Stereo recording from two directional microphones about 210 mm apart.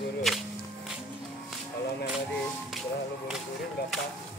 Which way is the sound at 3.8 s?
50° left (ahead or behind).